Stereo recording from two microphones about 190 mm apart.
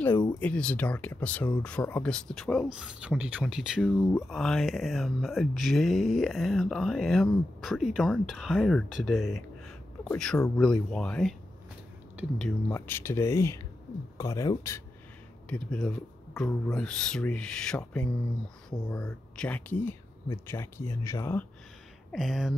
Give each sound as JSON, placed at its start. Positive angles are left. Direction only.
{"t": 0.4, "sound": "speech", "side_deg": 5}
{"t": 12.4, "sound": "speech", "side_deg": 5}
{"t": 15.5, "sound": "speech", "side_deg": 5}
{"t": 22.1, "sound": "speech", "side_deg": 0}